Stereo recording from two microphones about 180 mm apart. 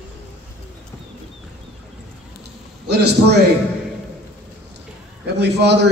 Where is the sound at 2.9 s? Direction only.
65° right (ahead or behind).